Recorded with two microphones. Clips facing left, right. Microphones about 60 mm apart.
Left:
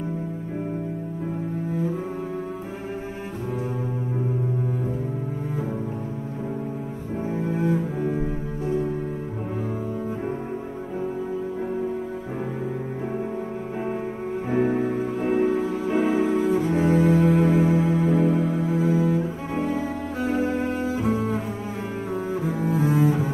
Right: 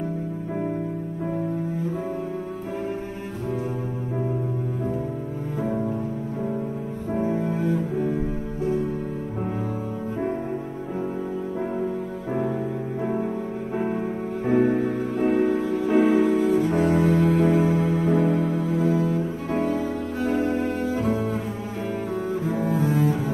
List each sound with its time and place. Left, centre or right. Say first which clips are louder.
7.3 s cello: right 1 dB; centre
7.6 s cello: even; centre
14.5 s music: right 2 dB; centre
17.7 s cello: even; centre
22.3 s double bass: even; centre